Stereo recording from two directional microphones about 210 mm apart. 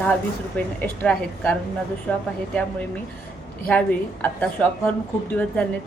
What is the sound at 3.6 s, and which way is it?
A woman's voice, 5° left (ahead or behind).